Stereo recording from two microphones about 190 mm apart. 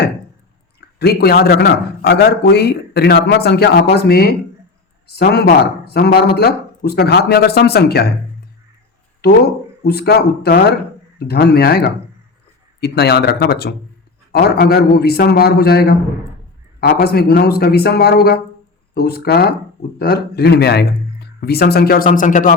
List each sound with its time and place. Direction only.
0.9 s a man's voice: 55° left (ahead or behind)
9.2 s a man's voice: 55° left (ahead or behind)